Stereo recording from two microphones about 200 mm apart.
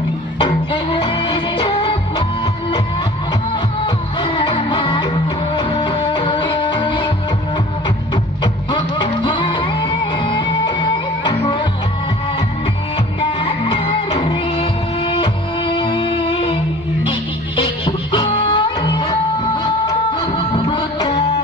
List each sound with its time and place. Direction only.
0.9 s music: 25° left (ahead or behind)
3.8 s music: 20° left (ahead or behind)
8.7 s music: 25° left (ahead or behind)
13.2 s music: 25° left (ahead or behind)
17.8 s music: 25° left (ahead or behind)